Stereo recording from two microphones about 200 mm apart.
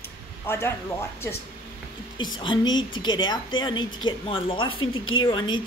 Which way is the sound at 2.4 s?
25° left (ahead or behind).